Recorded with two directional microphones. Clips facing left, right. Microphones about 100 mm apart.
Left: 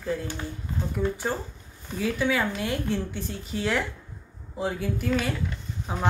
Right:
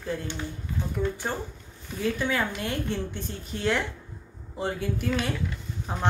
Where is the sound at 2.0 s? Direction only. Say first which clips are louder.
Left 2 dB; 5° left (ahead or behind).